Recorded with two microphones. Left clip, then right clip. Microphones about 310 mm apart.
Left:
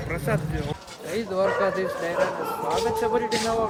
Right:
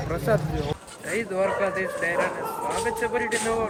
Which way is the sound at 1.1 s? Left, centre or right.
Centre.